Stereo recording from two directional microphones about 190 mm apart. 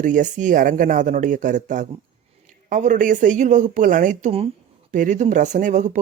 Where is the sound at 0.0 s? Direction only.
40° right (ahead or behind).